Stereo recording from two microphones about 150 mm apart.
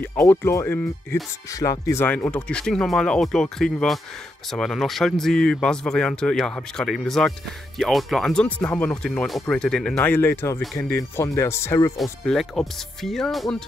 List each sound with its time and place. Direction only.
0.0 s speech: 15° left (ahead or behind)
12.0 s speech: centre (ahead or behind)